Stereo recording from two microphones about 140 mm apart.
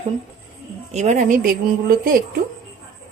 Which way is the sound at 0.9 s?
55° right (ahead or behind).